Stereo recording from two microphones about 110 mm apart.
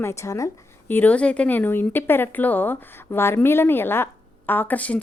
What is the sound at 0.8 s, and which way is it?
A woman's voice, 15° left (ahead or behind).